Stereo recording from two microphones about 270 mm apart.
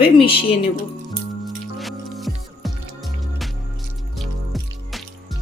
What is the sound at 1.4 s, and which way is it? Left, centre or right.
Music, centre.